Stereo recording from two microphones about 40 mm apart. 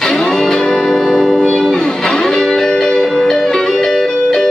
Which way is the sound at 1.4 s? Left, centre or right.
Centre.